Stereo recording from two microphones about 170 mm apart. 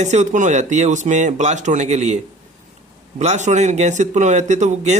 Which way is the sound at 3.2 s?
40° right (ahead or behind).